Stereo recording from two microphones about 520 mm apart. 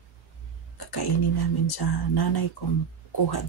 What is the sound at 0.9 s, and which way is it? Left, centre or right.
Speech, left.